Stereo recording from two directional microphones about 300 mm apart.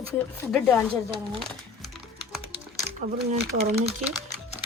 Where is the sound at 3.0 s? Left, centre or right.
Right.